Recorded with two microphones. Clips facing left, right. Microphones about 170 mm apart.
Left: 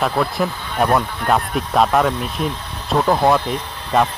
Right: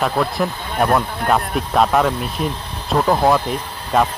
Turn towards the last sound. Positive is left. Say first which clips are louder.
# even
turn(degrees=0)  # may be behind; listen again after turning